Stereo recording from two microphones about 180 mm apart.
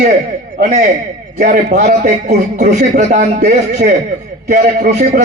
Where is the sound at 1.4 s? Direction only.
45° right (ahead or behind).